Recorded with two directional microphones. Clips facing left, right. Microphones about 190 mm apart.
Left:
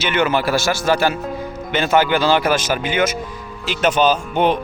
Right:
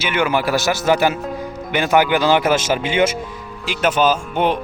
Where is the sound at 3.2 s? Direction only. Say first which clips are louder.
Even; centre (ahead or behind).